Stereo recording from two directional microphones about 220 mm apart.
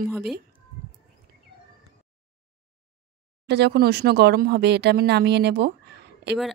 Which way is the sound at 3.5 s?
50° right (ahead or behind).